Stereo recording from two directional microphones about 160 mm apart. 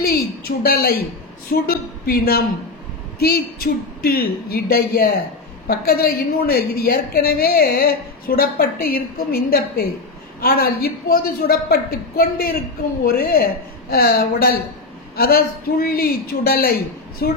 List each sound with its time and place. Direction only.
0.0 s a woman's voice: 75° left (ahead or behind)